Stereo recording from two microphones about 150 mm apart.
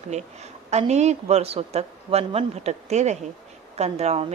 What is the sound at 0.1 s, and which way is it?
A woman's voice, 45° right (ahead or behind).